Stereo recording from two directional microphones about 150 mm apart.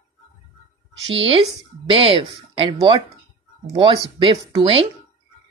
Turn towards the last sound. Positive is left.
turn(degrees=-35)  # may be behind; listen again after turning